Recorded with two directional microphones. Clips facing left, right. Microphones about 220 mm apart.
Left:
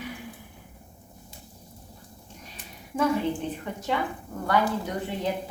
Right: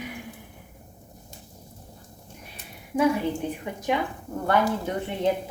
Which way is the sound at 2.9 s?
10° right (ahead or behind).